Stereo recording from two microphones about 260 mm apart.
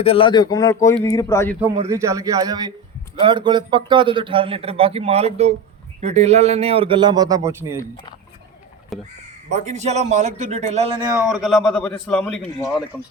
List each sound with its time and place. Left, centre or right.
0.0 s speech: left
1.9 s a man's voice: centre
8.9 s a man's voice: centre
9.5 s a man's voice: right
11.3 s a man's voice: centre